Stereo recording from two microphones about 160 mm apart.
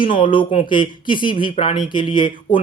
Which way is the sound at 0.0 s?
30° left (ahead or behind).